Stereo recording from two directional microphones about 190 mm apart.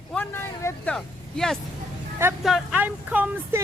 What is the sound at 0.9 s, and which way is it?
Speech, centre (ahead or behind).